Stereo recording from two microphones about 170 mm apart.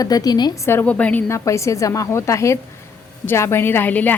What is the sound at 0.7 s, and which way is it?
Speech, 10° left (ahead or behind).